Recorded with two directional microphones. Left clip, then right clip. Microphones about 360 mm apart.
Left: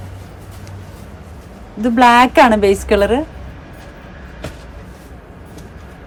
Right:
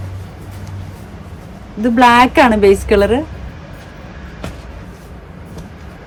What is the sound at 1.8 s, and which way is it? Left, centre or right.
A woman's voice, centre.